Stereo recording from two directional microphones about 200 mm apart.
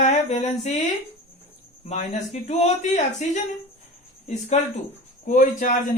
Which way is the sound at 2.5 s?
35° left (ahead or behind).